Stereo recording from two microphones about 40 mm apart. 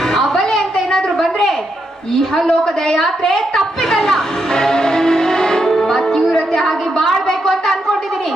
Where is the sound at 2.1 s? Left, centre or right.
Centre.